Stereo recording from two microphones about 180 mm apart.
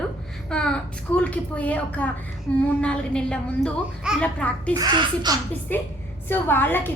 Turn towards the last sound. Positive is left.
turn(degrees=10)  # may be behind; listen again after turning